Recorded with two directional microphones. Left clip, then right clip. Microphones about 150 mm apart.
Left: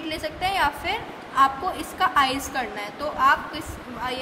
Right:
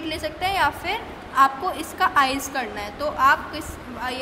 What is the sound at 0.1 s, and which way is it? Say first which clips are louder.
A woman's voice: right 1 dB; 25° right (ahead or behind).